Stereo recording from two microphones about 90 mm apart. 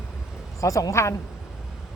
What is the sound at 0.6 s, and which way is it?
Speech, 40° left (ahead or behind).